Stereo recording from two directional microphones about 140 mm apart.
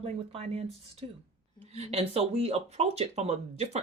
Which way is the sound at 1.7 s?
50° right (ahead or behind).